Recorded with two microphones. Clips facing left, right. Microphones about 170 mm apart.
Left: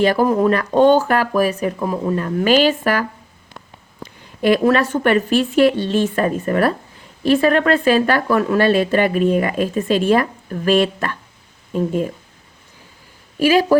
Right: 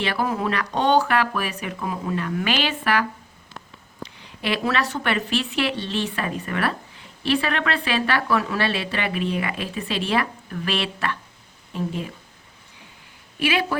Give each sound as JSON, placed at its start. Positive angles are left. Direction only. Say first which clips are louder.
{"t": 0.0, "sound": "speech", "louder": "left 9 dB", "side_deg": 40}
{"t": 13.4, "sound": "speech", "louder": "left 9 dB", "side_deg": 40}